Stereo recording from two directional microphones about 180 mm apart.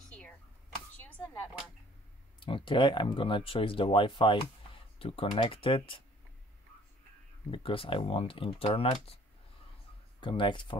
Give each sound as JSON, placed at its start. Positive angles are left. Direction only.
{"t": 2.4, "sound": "speech", "side_deg": 25}
{"t": 7.5, "sound": "speech", "side_deg": 30}
{"t": 10.2, "sound": "speech", "side_deg": 25}